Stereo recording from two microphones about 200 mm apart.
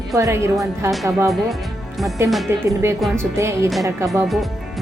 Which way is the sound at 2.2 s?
10° right (ahead or behind).